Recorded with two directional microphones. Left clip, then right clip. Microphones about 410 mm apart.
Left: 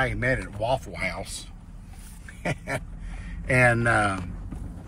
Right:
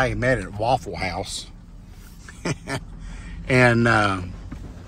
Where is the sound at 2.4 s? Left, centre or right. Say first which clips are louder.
Right 1 dB; centre.